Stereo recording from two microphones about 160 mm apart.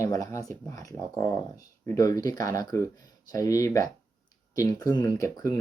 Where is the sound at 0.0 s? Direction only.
20° left (ahead or behind).